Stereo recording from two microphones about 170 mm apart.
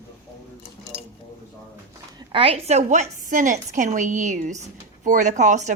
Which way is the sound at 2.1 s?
25° right (ahead or behind).